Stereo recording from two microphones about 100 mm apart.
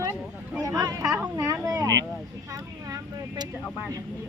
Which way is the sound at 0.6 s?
35° right (ahead or behind).